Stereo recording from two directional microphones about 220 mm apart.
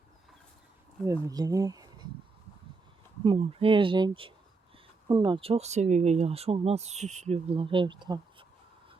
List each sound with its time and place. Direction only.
1.0 s speech: 15° right (ahead or behind)
3.2 s speech: 25° right (ahead or behind)